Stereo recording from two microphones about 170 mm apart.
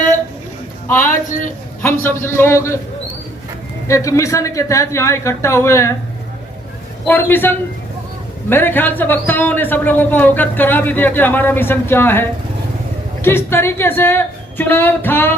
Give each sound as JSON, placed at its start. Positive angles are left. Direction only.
{"t": 1.8, "sound": "a man's voice", "side_deg": 15}
{"t": 3.8, "sound": "a man's voice", "side_deg": 20}
{"t": 7.0, "sound": "a man's voice", "side_deg": 10}